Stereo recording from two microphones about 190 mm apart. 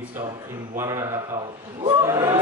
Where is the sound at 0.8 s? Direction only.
15° right (ahead or behind).